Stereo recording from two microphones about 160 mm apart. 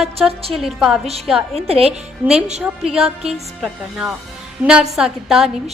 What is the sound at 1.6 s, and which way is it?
Speech, 40° right (ahead or behind).